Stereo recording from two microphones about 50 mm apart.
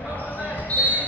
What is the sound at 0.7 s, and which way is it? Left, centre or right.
Basketball bounce, left.